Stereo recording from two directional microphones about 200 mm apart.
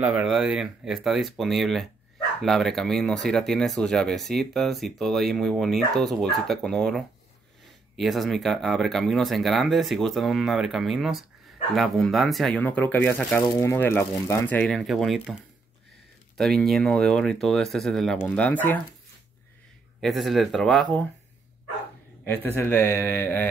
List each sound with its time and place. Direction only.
0.0 s speech: 5° right (ahead or behind)
16.3 s speech: centre (ahead or behind)
20.0 s speech: centre (ahead or behind)
22.2 s speech: 10° left (ahead or behind)